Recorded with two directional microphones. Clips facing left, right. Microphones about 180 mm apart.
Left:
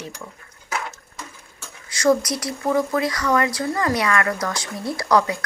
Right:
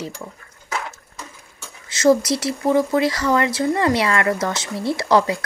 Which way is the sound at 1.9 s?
25° right (ahead or behind).